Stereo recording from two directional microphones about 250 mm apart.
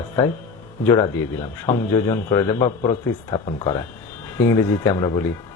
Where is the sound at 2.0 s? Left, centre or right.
Centre.